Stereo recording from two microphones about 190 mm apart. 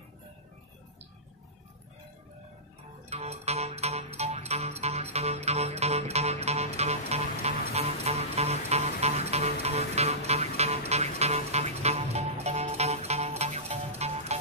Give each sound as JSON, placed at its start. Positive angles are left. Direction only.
{"t": 3.1, "sound": "music", "side_deg": -35}